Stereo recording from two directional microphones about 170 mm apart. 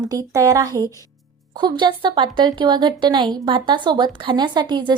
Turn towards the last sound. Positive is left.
turn(degrees=-25)  # may be behind; listen again after turning